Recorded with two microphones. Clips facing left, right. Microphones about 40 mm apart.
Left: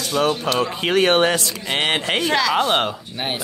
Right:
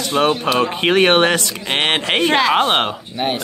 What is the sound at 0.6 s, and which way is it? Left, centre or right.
Speech, right.